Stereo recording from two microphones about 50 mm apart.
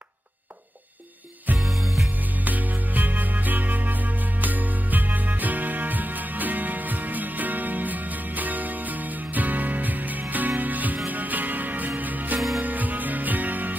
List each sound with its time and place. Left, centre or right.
1.6 s music: centre
2.4 s music: right